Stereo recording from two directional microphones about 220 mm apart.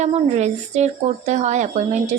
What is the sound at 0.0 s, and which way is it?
A woman's voice, 30° right (ahead or behind).